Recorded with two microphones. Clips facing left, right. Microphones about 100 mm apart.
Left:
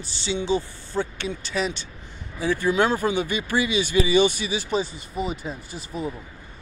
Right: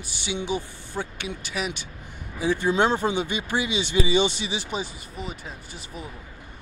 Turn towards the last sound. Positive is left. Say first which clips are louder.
# left 6 dB
turn(degrees=0)  # may be behind; listen again after turning